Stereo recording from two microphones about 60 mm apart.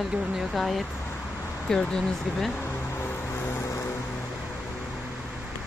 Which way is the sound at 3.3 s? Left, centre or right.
Left.